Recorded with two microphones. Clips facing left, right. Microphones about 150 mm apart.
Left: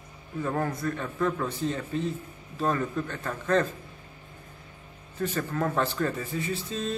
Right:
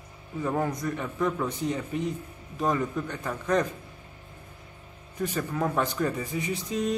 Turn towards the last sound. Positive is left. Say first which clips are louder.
# right 3 dB
turn(degrees=-15)  # may be behind; listen again after turning